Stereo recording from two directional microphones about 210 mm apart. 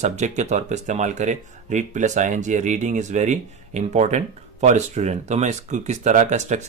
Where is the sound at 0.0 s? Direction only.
35° right (ahead or behind).